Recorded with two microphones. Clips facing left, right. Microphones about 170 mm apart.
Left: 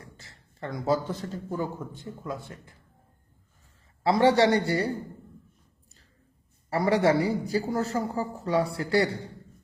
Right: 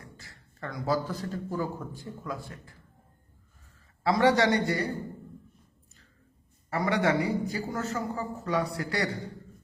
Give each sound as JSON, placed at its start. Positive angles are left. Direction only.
{"t": 0.0, "sound": "speech", "side_deg": 25}
{"t": 4.0, "sound": "a man's voice", "side_deg": 30}
{"t": 6.7, "sound": "a man's voice", "side_deg": 35}